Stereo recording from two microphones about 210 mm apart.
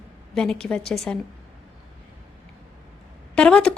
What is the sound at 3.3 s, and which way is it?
Speech, 5° left (ahead or behind).